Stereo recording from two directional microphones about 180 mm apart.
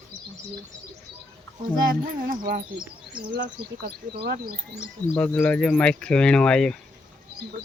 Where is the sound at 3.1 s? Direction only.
55° right (ahead or behind).